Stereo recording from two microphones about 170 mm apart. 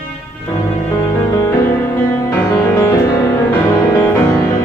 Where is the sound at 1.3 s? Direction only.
20° left (ahead or behind).